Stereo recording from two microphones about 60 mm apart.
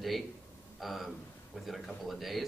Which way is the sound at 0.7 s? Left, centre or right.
Centre.